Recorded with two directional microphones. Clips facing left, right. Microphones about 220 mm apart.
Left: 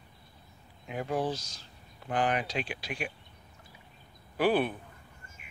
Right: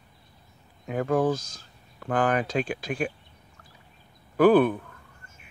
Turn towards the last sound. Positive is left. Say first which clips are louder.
# right 9 dB
turn(degrees=-45)  # may be behind; listen again after turning